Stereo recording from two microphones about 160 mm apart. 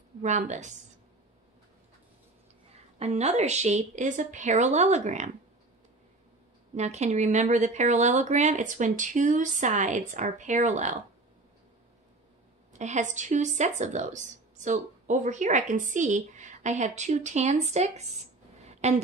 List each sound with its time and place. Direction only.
0.2 s speech: 45° right (ahead or behind)
3.0 s speech: 40° right (ahead or behind)
6.7 s speech: 45° right (ahead or behind)
12.7 s a woman's voice: 50° right (ahead or behind)